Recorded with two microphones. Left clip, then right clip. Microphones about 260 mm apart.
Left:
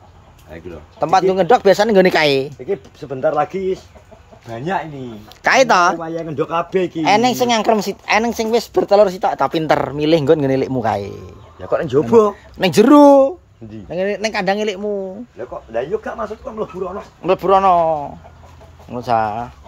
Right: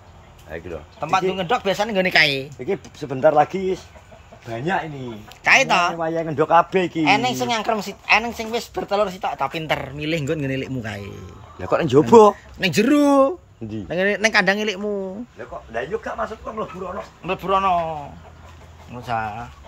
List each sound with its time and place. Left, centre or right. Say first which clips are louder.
0.5 s speech: right 3 dB; centre
0.9 s speech: left 7 dB; left
2.6 s speech: left 2 dB; right
5.4 s speech: left 4 dB; centre
6.0 s a man's voice: right 2 dB; centre
7.1 s speech: left 7 dB; left; by 11.2 s centre
11.6 s speech: even; right
12.5 s speech: left 8 dB; centre
15.7 s a man's voice: left 5 dB; left
17.2 s speech: left 7 dB; centre